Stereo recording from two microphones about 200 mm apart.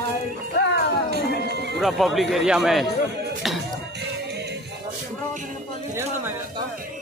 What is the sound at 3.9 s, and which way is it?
Music, 55° right (ahead or behind).